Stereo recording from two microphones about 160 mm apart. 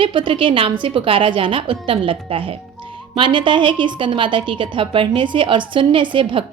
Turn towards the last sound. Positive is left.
turn(degrees=-35)  # may be behind; listen again after turning